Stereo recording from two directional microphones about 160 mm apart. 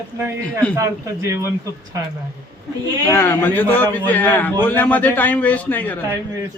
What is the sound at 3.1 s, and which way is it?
A man's voice, 15° left (ahead or behind).